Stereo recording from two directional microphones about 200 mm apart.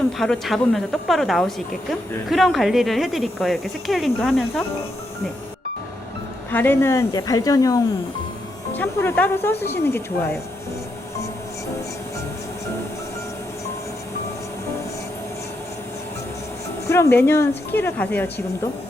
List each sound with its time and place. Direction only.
0.2 s speech: centre (ahead or behind)
6.5 s speech: 10° left (ahead or behind)
16.9 s speech: 15° left (ahead or behind)